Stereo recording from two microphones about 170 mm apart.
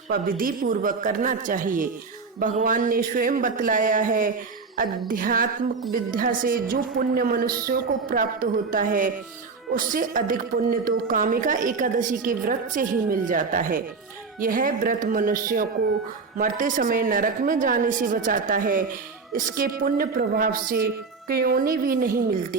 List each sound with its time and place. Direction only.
0.1 s a woman's voice: 55° right (ahead or behind)